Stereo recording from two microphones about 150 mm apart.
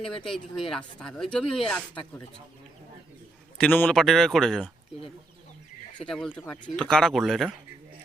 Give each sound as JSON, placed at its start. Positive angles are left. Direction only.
{"t": 0.3, "sound": "speech", "side_deg": 0}
{"t": 3.6, "sound": "speech", "side_deg": 10}
{"t": 6.0, "sound": "speech", "side_deg": 5}